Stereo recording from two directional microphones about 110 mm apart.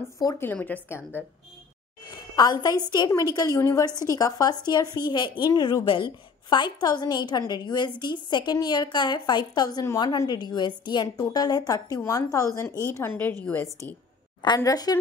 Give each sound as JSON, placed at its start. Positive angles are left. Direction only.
{"t": 0.4, "sound": "a woman's voice", "side_deg": 15}
{"t": 2.0, "sound": "a woman's voice", "side_deg": 35}
{"t": 14.4, "sound": "a woman's voice", "side_deg": 40}